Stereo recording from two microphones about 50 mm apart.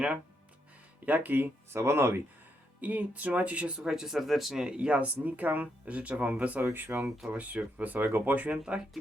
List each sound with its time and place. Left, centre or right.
1.0 s speech: right
1.7 s speech: right
2.8 s speech: right
3.8 s speech: centre
4.6 s speech: centre
6.7 s speech: right
7.3 s speech: right